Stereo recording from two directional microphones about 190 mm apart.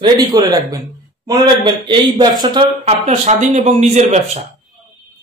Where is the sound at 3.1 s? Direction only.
40° right (ahead or behind).